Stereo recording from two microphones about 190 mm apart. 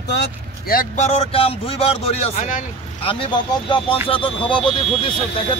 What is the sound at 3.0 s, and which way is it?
Speech, 30° left (ahead or behind).